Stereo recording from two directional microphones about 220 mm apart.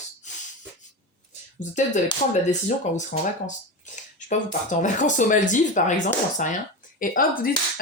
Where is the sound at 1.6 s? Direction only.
35° left (ahead or behind).